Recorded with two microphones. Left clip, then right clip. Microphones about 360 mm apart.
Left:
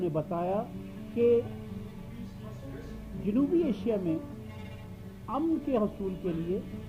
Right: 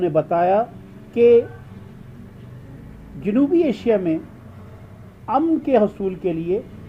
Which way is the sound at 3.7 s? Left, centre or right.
Right.